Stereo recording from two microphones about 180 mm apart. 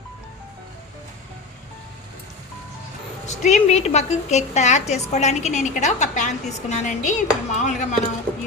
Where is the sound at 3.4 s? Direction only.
40° left (ahead or behind).